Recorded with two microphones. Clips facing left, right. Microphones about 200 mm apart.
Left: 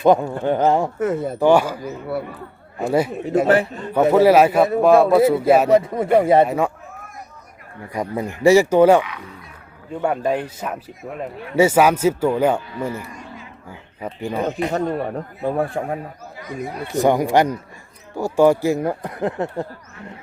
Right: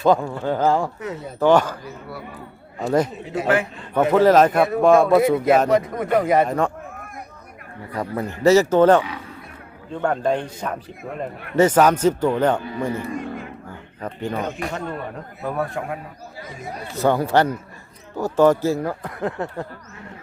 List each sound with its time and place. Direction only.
0.0 s speech: 20° left (ahead or behind)
0.9 s speech: 50° left (ahead or behind)
1.4 s speech: 10° left (ahead or behind)
1.8 s speech: 60° left (ahead or behind)
3.4 s speech: 35° left (ahead or behind)
4.1 s speech: 10° left (ahead or behind)
5.7 s speech: 30° left (ahead or behind)
7.9 s speech: 10° left (ahead or behind)
13.1 s a sound: 55° right (ahead or behind)
13.7 s speech: 10° left (ahead or behind)
14.7 s speech: 35° left (ahead or behind)
16.9 s speech: 15° left (ahead or behind)